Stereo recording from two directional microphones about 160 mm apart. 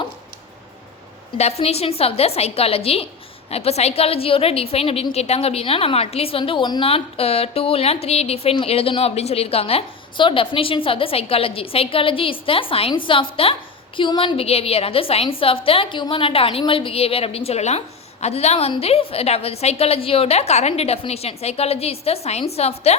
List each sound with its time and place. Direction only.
1.4 s a woman's voice: 40° left (ahead or behind)